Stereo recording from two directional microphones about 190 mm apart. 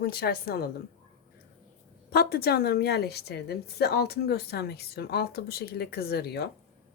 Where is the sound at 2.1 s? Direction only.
55° left (ahead or behind).